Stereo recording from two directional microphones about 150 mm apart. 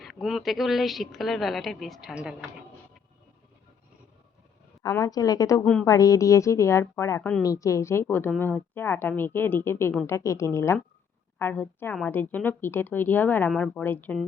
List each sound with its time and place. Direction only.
0.0 s a woman's voice: centre (ahead or behind)
4.8 s speech: 25° left (ahead or behind)
7.4 s a woman's voice: 20° left (ahead or behind)